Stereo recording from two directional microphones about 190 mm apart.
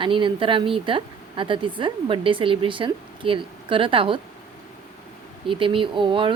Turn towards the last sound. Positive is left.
turn(degrees=-25)  # may be behind; listen again after turning